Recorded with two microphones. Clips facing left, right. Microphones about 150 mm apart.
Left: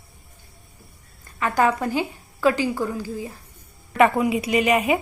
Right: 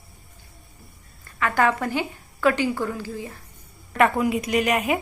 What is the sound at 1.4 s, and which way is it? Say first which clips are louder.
A woman's voice: left 1 dB; 20° left (ahead or behind).